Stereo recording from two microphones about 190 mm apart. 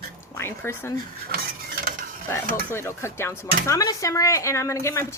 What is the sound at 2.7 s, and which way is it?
Speech, 15° left (ahead or behind).